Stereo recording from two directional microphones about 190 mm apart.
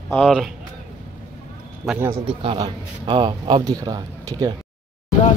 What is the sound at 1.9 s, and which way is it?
Speech, 10° right (ahead or behind).